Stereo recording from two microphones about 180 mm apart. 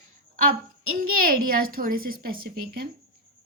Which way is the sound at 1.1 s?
50° right (ahead or behind).